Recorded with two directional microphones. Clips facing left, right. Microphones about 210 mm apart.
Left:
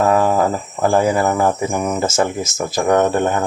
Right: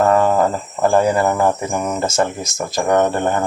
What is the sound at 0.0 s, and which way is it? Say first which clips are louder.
Speech: right 1 dB; 5° left (ahead or behind).